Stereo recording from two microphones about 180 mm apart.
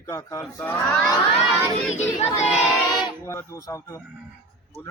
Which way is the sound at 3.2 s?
15° left (ahead or behind).